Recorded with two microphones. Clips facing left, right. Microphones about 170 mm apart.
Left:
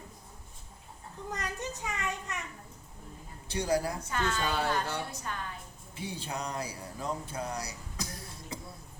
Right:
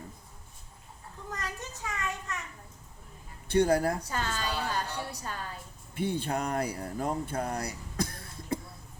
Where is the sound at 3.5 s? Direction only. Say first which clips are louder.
Right 5 dB; 55° right (ahead or behind).